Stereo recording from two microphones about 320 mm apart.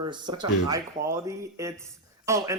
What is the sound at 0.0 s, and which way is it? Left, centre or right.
Speech, centre.